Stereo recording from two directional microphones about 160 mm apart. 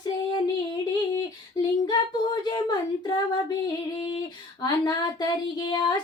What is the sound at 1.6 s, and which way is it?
Female singing, 25° left (ahead or behind).